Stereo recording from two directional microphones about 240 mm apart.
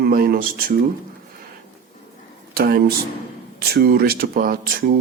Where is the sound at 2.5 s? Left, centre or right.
Right.